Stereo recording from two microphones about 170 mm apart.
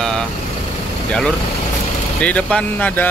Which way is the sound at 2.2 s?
5° left (ahead or behind).